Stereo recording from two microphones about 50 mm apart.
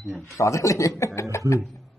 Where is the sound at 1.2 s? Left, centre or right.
Left.